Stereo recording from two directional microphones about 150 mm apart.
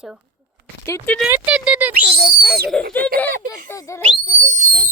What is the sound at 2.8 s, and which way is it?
Bird, 75° right (ahead or behind).